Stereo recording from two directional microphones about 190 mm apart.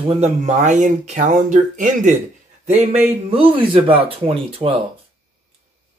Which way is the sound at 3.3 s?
30° right (ahead or behind).